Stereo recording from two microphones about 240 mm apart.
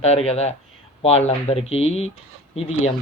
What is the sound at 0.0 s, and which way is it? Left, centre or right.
Speech, left.